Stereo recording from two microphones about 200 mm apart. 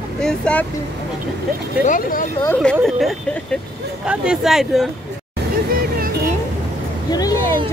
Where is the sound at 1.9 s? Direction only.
45° left (ahead or behind).